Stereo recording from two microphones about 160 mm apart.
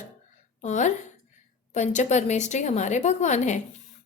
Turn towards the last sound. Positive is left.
turn(degrees=45)  # may be behind; listen again after turning